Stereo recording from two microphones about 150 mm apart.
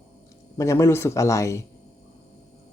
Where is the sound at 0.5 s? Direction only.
20° left (ahead or behind).